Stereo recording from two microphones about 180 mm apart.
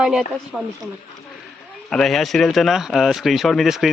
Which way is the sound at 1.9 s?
Centre (ahead or behind).